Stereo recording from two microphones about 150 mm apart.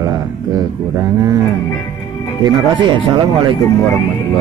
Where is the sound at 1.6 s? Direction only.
15° left (ahead or behind).